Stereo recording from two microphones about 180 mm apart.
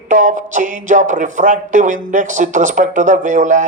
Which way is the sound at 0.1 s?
45° right (ahead or behind).